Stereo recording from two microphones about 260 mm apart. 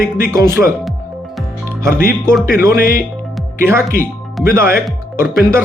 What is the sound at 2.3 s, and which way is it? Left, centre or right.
Speech, centre.